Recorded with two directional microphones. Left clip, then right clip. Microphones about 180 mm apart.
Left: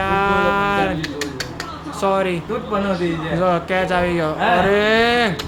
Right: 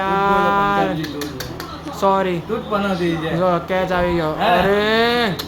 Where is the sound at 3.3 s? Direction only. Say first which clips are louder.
Left 1 dB; centre (ahead or behind).